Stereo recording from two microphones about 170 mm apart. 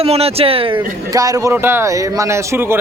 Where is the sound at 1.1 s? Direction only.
20° right (ahead or behind).